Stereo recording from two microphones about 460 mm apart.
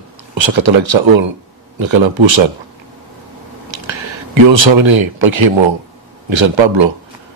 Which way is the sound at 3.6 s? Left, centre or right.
Right.